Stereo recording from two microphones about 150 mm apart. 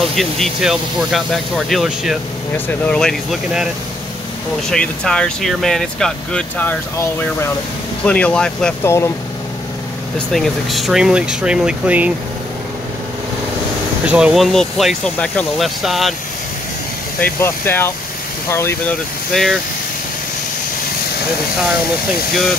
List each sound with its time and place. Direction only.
0.0 s speech: centre (ahead or behind)
2.5 s speech: 10° left (ahead or behind)
8.8 s speech: 15° left (ahead or behind)
10.1 s speech: centre (ahead or behind)
14.0 s speech: 5° right (ahead or behind); by 15.4 s 10° left (ahead or behind)
15.5 s speech: centre (ahead or behind)
17.2 s speech: 15° left (ahead or behind)
19.3 s speech: centre (ahead or behind)
22.3 s speech: centre (ahead or behind)